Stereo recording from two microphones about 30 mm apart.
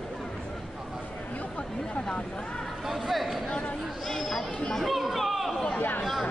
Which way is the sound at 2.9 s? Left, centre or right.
Centre.